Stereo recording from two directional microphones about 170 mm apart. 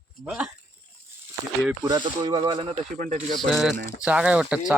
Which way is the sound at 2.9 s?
50° right (ahead or behind).